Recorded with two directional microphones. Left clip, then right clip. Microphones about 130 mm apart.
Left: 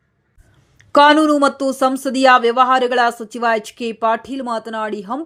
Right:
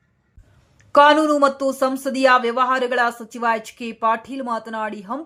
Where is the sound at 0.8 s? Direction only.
35° left (ahead or behind).